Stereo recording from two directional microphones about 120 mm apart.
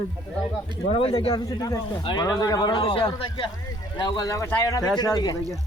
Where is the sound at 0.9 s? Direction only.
60° left (ahead or behind).